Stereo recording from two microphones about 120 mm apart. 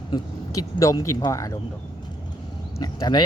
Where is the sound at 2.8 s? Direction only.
35° left (ahead or behind).